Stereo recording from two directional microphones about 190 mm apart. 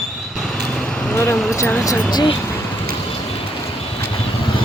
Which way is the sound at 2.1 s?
25° left (ahead or behind).